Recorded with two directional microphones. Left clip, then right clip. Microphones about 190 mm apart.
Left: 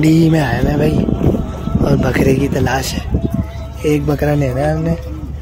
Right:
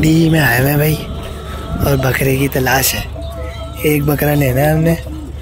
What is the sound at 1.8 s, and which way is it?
Speech, centre (ahead or behind).